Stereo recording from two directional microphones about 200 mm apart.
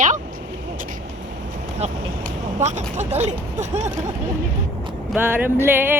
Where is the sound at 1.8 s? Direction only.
30° right (ahead or behind).